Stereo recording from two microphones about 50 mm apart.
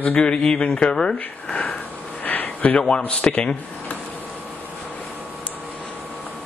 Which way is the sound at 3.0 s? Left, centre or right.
Left.